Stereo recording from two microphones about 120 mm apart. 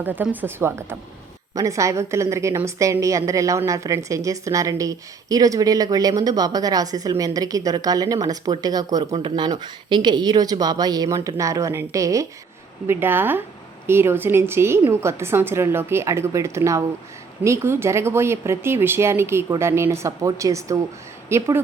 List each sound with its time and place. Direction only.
0.0 s a woman's voice: 15° right (ahead or behind)